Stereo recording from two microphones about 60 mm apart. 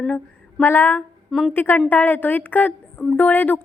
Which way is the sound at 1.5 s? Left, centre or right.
Left.